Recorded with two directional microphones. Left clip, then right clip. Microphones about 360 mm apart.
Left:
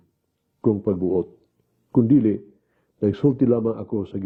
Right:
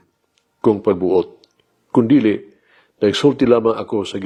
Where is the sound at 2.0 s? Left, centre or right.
Centre.